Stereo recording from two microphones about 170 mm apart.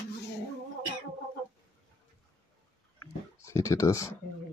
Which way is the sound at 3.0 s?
15° left (ahead or behind).